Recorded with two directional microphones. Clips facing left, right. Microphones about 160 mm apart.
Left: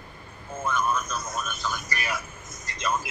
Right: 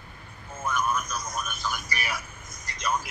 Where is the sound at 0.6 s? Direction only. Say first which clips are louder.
Left 1 dB; 15° right (ahead or behind).